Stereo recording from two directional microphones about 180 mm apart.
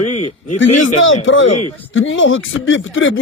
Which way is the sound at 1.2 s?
90° left.